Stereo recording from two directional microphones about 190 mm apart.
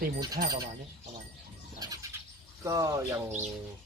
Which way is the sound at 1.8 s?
20° right (ahead or behind).